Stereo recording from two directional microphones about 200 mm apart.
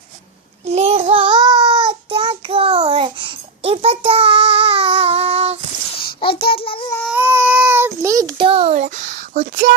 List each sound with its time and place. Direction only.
0.6 s child singing: 30° right (ahead or behind)
6.1 s a child's voice: 25° left (ahead or behind)
7.1 s child singing: 10° right (ahead or behind)
8.4 s a sound: 30° right (ahead or behind); by 9.7 s 45° right (ahead or behind)